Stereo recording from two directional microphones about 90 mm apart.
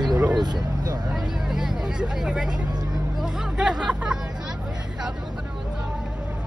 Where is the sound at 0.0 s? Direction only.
50° right (ahead or behind).